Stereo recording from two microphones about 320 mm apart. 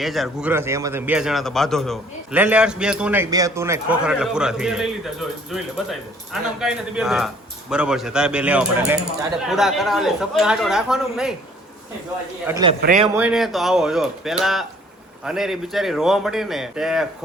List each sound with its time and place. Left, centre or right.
0.0 s a man's voice: centre
12.5 s a man's voice: centre
12.8 s speech: right
13.1 s a man's voice: centre